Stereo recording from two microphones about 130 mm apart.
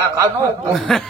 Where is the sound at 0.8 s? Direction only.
Centre (ahead or behind).